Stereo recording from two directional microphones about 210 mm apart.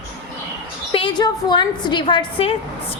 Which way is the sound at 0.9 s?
25° left (ahead or behind).